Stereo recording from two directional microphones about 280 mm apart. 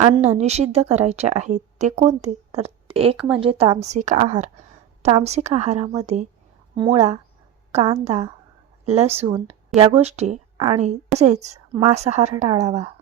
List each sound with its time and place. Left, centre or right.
0.0 s speech: right
3.2 s speech: centre
3.4 s speech: right